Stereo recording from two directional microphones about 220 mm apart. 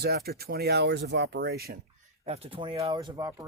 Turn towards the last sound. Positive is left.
turn(degrees=-15)  # may be behind; listen again after turning